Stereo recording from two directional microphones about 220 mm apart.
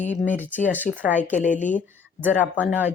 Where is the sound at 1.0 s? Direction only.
10° right (ahead or behind).